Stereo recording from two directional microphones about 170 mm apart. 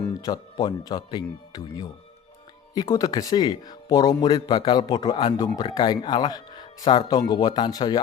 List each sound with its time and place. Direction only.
0.2 s a man's voice: 25° left (ahead or behind)